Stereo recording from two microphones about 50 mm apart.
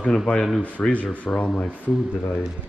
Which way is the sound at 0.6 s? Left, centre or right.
Left.